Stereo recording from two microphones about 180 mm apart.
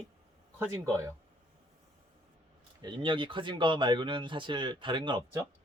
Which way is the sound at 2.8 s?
30° right (ahead or behind).